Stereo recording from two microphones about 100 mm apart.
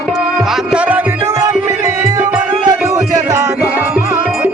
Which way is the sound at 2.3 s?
10° right (ahead or behind).